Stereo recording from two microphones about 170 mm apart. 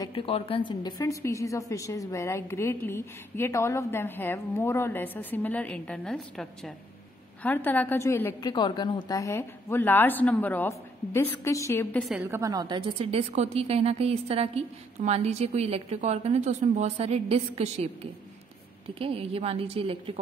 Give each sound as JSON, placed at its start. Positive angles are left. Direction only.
{"t": 0.0, "sound": "a woman's voice", "side_deg": 30}
{"t": 8.5, "sound": "a woman's voice", "side_deg": 25}
{"t": 12.2, "sound": "a woman's voice", "side_deg": -15}
{"t": 18.9, "sound": "a woman's voice", "side_deg": -35}